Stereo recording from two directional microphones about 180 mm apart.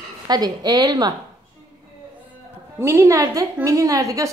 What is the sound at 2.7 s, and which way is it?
A woman's voice, 15° right (ahead or behind).